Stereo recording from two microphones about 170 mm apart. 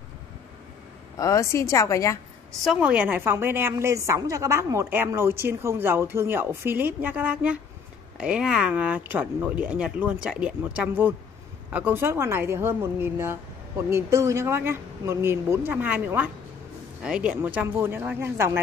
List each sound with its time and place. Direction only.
1.1 s a woman's voice: 20° left (ahead or behind)
2.6 s a woman's voice: 5° right (ahead or behind)